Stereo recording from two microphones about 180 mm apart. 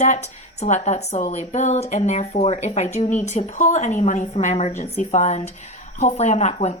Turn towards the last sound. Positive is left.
turn(degrees=40)  # may be behind; listen again after turning